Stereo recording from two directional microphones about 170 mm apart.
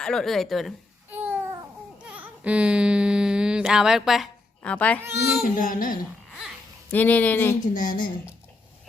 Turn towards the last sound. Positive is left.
turn(degrees=50)  # may be behind; listen again after turning